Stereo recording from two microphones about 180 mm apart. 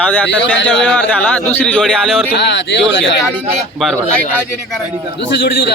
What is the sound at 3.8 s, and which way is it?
A man's voice, centre (ahead or behind).